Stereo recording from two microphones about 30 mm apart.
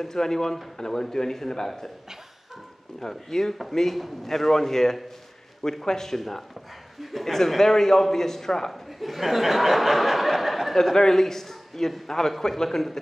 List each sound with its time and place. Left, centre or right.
0.0 s a man's voice: centre
3.0 s speech: centre
3.9 s a man's voice: centre
7.3 s a man's voice: centre
8.7 s speech: centre
10.7 s a man's voice: centre